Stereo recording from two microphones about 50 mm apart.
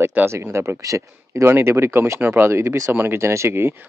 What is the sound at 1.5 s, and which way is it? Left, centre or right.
Speech, right.